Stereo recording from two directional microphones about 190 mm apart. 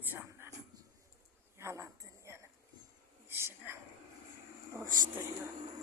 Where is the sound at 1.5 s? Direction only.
15° right (ahead or behind).